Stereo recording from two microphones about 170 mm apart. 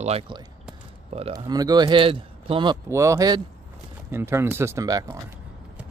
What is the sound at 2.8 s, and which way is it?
Speech, 15° right (ahead or behind).